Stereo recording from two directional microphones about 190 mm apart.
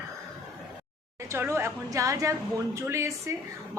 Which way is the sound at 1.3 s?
15° right (ahead or behind).